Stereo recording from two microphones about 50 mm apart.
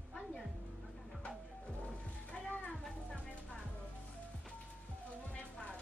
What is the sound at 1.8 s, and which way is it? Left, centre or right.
Music, left.